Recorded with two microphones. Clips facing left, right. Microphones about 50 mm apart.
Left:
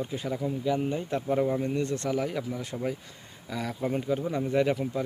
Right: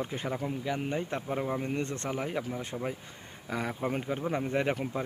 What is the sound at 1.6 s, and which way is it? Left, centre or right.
Speech, right.